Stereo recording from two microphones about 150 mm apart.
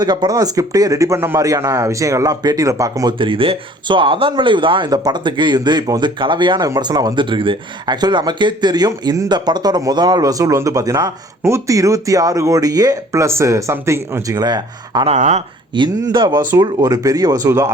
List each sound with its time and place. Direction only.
0.0 s speech: 30° right (ahead or behind)
15.0 s speech: 50° right (ahead or behind)
15.7 s speech: 30° right (ahead or behind)